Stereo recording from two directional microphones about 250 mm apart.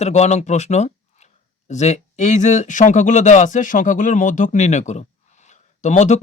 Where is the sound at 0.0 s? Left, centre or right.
Left.